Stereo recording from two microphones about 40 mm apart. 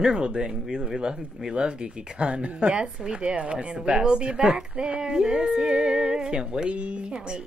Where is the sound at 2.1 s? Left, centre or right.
Right.